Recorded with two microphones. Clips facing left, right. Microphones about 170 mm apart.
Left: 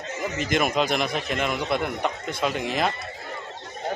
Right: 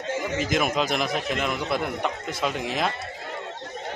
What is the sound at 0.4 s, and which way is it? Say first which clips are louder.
A man's voice: left 3 dB; centre (ahead or behind).